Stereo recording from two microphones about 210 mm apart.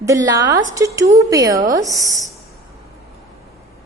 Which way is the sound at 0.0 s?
15° right (ahead or behind).